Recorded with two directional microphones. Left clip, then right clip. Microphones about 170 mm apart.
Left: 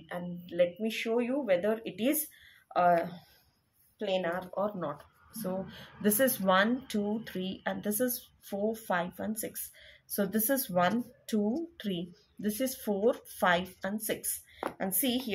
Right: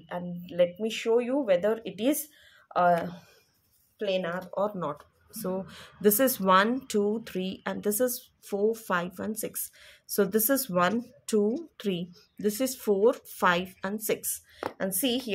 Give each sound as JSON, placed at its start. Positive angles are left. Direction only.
{"t": 0.0, "sound": "speech", "side_deg": -20}
{"t": 15.0, "sound": "speech", "side_deg": -35}